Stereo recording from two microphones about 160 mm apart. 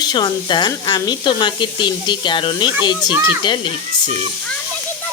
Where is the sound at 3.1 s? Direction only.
15° right (ahead or behind).